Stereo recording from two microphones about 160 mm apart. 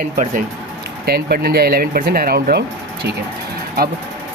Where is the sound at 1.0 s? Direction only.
75° right (ahead or behind).